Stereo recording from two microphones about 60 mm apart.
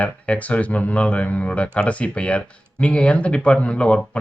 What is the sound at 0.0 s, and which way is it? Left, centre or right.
Speech, left.